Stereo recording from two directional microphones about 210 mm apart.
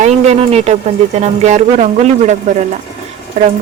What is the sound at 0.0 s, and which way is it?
Speech, 30° right (ahead or behind).